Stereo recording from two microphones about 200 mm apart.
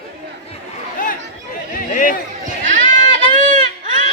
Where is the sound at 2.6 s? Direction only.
40° right (ahead or behind).